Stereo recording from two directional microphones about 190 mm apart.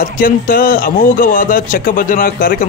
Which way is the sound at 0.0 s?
45° left (ahead or behind).